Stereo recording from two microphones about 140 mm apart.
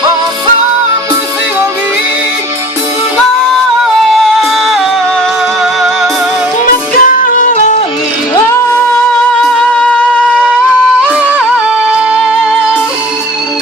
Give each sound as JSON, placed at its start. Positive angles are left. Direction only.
{"t": 4.1, "sound": "music", "side_deg": 0}
{"t": 7.0, "sound": "music", "side_deg": 75}
{"t": 9.4, "sound": "music", "side_deg": 5}
{"t": 11.1, "sound": "music", "side_deg": -10}